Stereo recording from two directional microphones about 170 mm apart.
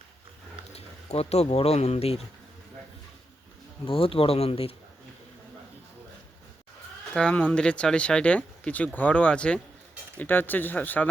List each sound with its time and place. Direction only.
0.7 s speech: 40° left (ahead or behind)
3.8 s speech: 35° left (ahead or behind)
7.1 s speech: 5° left (ahead or behind)